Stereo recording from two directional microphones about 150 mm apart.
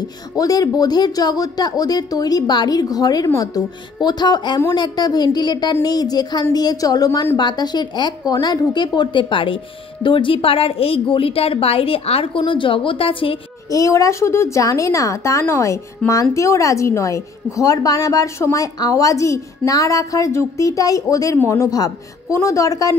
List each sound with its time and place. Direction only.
0.4 s a woman's voice: 25° left (ahead or behind)
13.7 s a woman's voice: 20° left (ahead or behind)